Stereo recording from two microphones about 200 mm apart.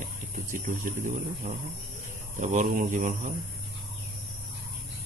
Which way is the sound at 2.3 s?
40° right (ahead or behind).